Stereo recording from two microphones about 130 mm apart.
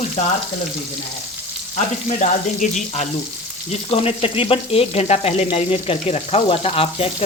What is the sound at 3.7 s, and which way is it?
Frying, 50° left (ahead or behind).